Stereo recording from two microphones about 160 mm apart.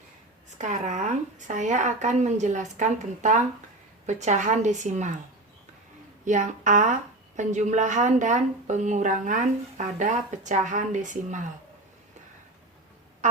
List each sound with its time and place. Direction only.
0.6 s a woman's voice: 50° right (ahead or behind)
6.2 s a woman's voice: 50° right (ahead or behind)